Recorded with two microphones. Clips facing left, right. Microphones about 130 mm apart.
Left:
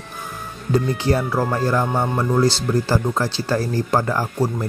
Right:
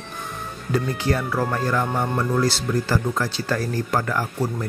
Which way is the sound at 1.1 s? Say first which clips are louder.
Left 3 dB; 30° left (ahead or behind).